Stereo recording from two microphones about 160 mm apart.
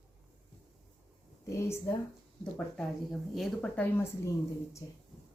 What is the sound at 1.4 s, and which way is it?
Speech, 15° left (ahead or behind).